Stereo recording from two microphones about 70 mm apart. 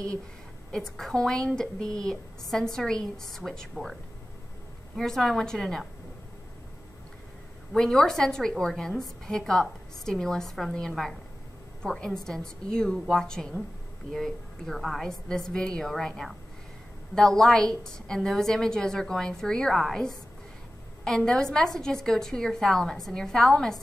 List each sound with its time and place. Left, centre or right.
0.7 s a woman's voice: centre
4.9 s a woman's voice: centre
7.7 s a woman's voice: centre